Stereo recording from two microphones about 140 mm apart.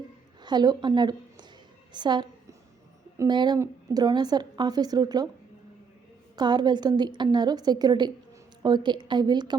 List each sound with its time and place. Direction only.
0.4 s a woman's voice: 30° right (ahead or behind)
1.9 s a sound: 30° right (ahead or behind)
3.2 s a woman's voice: 30° right (ahead or behind)
6.3 s a woman's voice: 30° right (ahead or behind)